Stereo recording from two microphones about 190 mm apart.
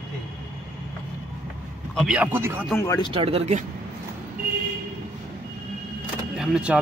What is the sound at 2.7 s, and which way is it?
Speech, 15° left (ahead or behind).